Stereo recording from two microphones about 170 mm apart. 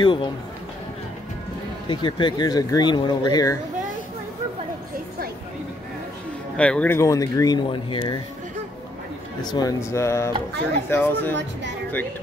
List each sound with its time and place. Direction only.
0.0 s speech: 30° left (ahead or behind)
1.9 s speech: 30° left (ahead or behind)
6.5 s speech: 5° left (ahead or behind); by 8.2 s 25° left (ahead or behind)
9.4 s speech: 25° left (ahead or behind)